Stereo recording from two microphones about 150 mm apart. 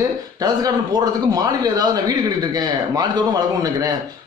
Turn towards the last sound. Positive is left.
turn(degrees=-25)  # may be behind; listen again after turning